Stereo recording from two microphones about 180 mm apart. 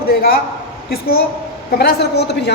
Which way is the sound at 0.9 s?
60° left (ahead or behind).